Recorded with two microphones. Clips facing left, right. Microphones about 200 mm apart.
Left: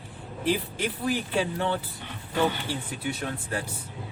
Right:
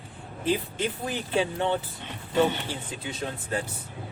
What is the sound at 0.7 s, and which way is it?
Speech, 20° right (ahead or behind).